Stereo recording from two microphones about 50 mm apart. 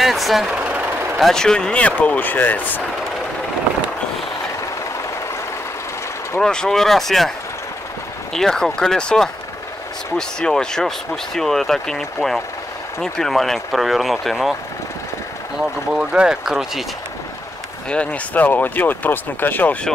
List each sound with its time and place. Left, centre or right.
0.0 s speech: centre
0.6 s vehicle: right
1.3 s speech: centre
1.8 s speech: left
6.4 s speech: centre
15.9 s speech: centre
16.4 s speech: centre
17.8 s speech: left